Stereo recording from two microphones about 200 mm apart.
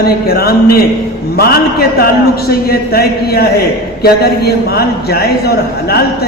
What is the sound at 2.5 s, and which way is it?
A man's voice, 50° left (ahead or behind).